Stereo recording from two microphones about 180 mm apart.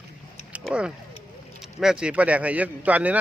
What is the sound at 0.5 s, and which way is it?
A man's voice, 5° right (ahead or behind).